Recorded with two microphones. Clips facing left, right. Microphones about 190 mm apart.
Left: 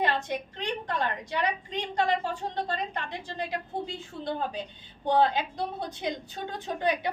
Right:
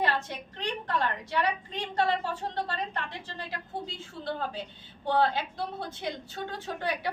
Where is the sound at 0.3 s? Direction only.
15° left (ahead or behind).